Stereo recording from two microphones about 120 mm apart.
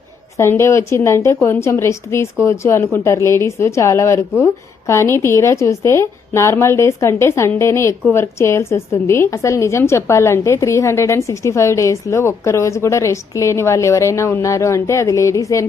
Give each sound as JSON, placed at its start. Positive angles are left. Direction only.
{"t": 0.3, "sound": "a woman's voice", "side_deg": 20}